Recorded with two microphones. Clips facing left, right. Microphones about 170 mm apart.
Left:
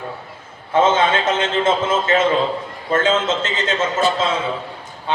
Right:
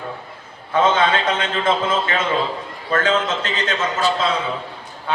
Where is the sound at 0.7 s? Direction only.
25° left (ahead or behind).